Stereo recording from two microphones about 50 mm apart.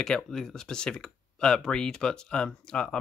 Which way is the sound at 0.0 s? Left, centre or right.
Centre.